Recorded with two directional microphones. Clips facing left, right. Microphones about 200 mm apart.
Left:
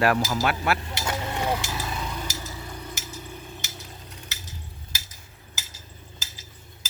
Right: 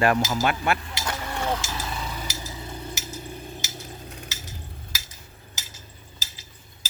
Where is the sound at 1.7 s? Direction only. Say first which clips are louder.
Left 1 dB; 5° left (ahead or behind).